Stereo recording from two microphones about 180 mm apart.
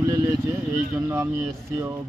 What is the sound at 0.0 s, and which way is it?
Speech, 15° right (ahead or behind).